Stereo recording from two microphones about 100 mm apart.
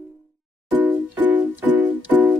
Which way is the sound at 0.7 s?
15° right (ahead or behind).